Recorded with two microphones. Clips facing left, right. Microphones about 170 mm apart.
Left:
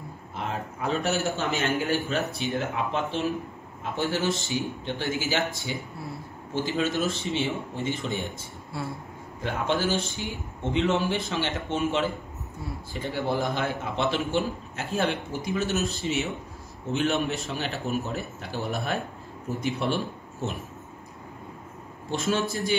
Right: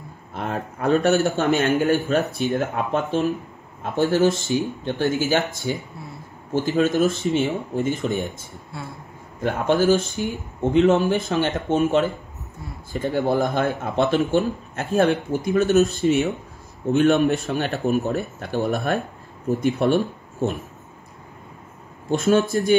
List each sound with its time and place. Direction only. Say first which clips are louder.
0.3 s a man's voice: right 5 dB; 55° right (ahead or behind)
8.7 s speech: left 2 dB; 5° left (ahead or behind)
9.8 s speech: right 9 dB; 45° right (ahead or behind)
22.1 s speech: right 8 dB; 50° right (ahead or behind)